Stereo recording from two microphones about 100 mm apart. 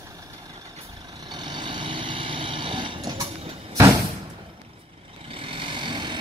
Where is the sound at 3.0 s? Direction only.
45° right (ahead or behind).